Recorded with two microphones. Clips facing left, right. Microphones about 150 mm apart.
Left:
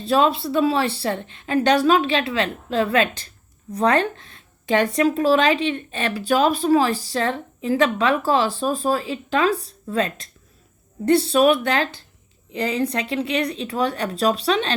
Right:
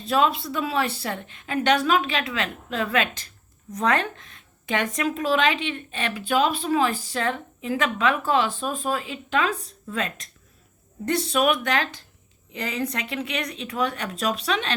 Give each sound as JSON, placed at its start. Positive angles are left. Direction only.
{"t": 0.0, "sound": "speech", "side_deg": 30}